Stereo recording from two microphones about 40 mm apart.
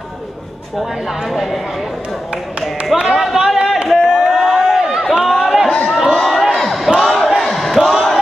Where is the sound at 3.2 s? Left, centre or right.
Centre.